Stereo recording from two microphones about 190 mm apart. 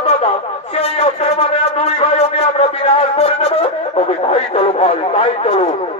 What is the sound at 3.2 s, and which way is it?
Radio, 30° left (ahead or behind).